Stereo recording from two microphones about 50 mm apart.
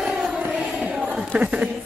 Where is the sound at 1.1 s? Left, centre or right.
Right.